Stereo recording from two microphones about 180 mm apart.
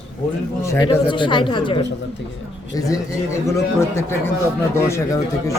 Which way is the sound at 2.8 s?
15° left (ahead or behind).